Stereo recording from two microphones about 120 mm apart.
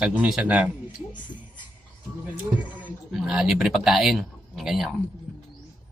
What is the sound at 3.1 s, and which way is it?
Speech, 5° right (ahead or behind).